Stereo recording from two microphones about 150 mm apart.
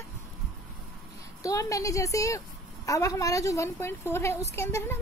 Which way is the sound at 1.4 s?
20° left (ahead or behind).